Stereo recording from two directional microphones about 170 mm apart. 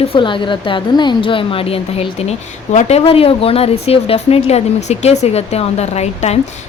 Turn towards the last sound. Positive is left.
turn(degrees=40)  # may be behind; listen again after turning